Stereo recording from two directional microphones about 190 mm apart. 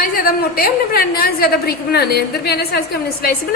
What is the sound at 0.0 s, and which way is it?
A woman's voice, 50° left (ahead or behind).